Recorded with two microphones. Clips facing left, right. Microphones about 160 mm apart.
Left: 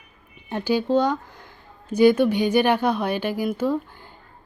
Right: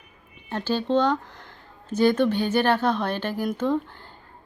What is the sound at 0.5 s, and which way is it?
Speech, 10° left (ahead or behind).